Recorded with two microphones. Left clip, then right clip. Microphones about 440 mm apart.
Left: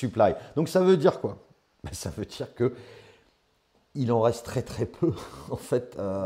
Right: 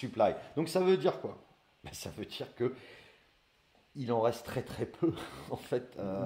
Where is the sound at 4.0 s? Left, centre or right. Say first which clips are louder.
Left 7 dB; left.